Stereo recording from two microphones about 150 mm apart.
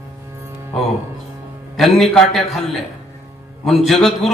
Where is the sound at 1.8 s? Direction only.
Centre (ahead or behind).